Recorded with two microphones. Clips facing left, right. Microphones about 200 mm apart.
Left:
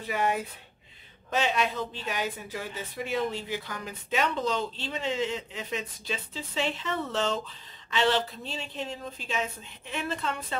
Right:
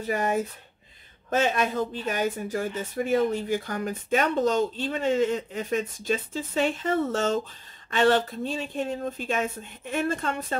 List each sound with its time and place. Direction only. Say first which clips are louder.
0.0 s speech: right 3 dB; 45° right (ahead or behind)